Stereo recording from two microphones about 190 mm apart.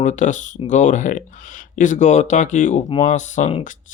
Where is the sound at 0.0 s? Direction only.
40° left (ahead or behind).